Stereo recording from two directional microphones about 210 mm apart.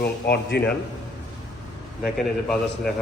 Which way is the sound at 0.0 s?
50° left (ahead or behind).